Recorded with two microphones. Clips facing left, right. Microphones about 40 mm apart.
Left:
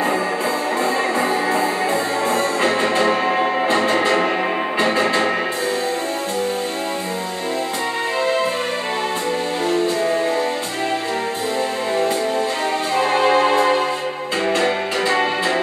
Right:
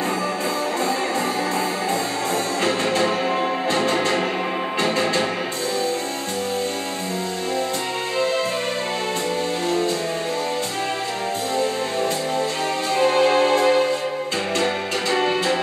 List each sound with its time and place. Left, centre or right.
0.8 s music: left
13.0 s music: left